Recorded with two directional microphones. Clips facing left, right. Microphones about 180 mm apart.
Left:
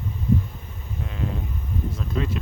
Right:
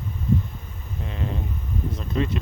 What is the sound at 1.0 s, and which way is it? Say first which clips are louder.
Speech: even; 5° left (ahead or behind).